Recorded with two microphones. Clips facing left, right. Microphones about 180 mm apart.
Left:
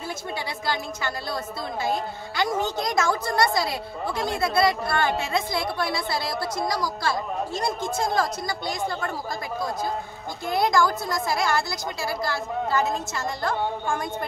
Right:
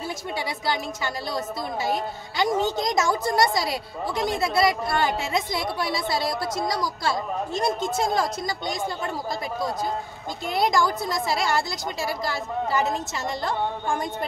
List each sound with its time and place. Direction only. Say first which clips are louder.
0.7 s a woman's voice: even; 15° right (ahead or behind)
10.4 s a woman's voice: left 1 dB; 20° right (ahead or behind)